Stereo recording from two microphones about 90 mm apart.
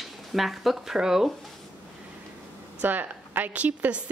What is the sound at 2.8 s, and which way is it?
A woman's voice, 20° right (ahead or behind).